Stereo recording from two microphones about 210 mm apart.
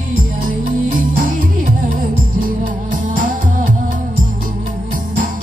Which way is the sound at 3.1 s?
40° right (ahead or behind).